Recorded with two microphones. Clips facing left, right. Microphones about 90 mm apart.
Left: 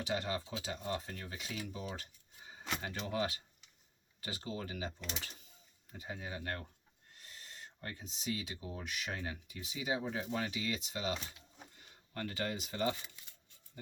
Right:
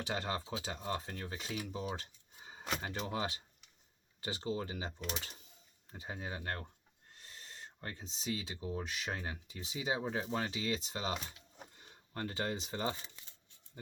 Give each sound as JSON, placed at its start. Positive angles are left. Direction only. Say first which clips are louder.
{"t": 0.0, "sound": "speech", "louder": "left 1 dB", "side_deg": -30}